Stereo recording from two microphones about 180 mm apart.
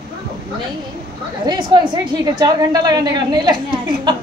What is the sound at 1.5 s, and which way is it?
A woman's voice, 25° right (ahead or behind).